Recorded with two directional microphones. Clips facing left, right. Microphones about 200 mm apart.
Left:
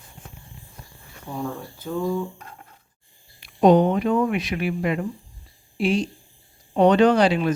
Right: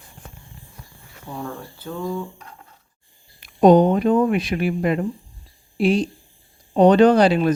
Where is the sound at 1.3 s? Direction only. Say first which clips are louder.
Left 2 dB; 5° left (ahead or behind).